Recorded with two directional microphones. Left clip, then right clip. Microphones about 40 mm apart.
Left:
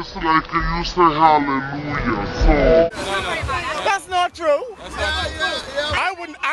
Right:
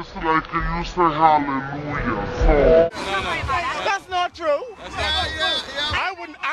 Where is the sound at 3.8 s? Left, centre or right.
Left.